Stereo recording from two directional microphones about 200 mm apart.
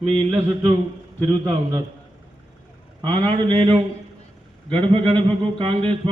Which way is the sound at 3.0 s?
25° right (ahead or behind).